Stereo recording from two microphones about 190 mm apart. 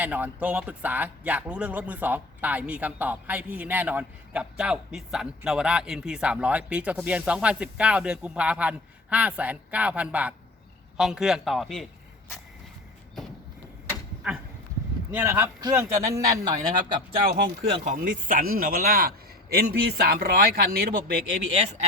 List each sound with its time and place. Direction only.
0.0 s a man's voice: 10° right (ahead or behind)
14.2 s speech: 5° right (ahead or behind); by 16.6 s 20° right (ahead or behind)
17.4 s speech: 45° right (ahead or behind)